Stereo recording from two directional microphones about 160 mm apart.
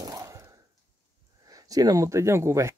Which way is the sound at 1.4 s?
25° right (ahead or behind).